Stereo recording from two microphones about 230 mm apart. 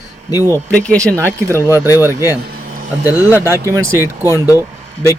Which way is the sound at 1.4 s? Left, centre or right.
Centre.